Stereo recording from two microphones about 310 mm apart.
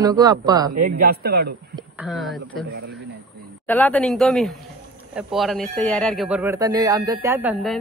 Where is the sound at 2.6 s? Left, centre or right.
Right.